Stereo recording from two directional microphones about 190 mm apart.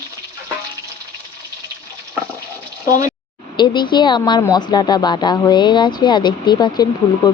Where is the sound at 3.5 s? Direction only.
25° left (ahead or behind).